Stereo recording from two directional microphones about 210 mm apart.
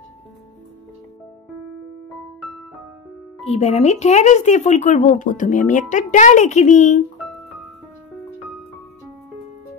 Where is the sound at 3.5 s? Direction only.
30° left (ahead or behind).